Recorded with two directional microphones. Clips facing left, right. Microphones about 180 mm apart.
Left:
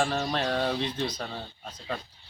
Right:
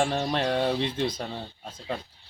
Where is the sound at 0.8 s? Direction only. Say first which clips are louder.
Right 3 dB; 25° right (ahead or behind).